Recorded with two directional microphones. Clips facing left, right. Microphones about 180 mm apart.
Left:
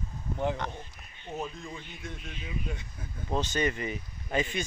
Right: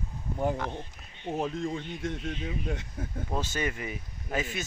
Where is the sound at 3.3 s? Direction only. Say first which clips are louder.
Left 3 dB; 5° right (ahead or behind).